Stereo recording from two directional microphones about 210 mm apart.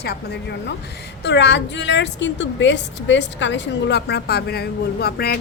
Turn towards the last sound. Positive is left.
turn(degrees=50)  # may be behind; listen again after turning